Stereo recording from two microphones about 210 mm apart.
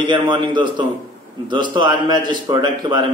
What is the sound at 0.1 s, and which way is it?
A man's voice, 20° right (ahead or behind).